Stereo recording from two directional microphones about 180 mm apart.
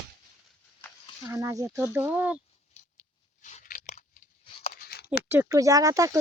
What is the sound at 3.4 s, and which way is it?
Crunch, 45° left (ahead or behind).